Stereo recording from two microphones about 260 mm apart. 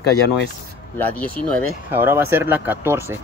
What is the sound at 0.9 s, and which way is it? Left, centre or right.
Speech, centre.